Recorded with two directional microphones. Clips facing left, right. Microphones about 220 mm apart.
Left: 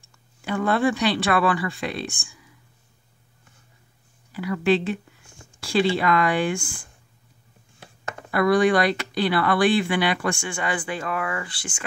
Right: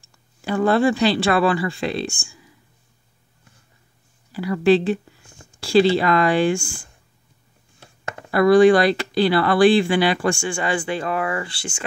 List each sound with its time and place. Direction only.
0.5 s speech: 30° right (ahead or behind)
4.3 s speech: 35° right (ahead or behind)
8.3 s speech: 30° right (ahead or behind)